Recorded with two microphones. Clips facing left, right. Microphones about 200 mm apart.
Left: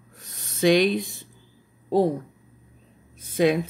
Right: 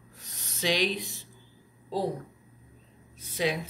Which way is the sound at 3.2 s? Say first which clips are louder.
Left 9 dB; 50° left (ahead or behind).